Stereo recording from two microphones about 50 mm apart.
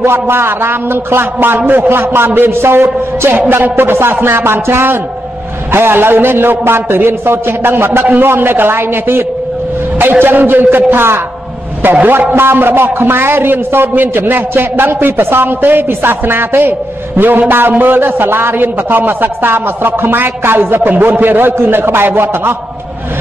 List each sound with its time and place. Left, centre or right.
0.0 s a man's voice: right
11.8 s a man's voice: right